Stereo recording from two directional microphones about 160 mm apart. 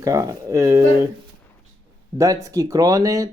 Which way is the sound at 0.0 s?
20° right (ahead or behind).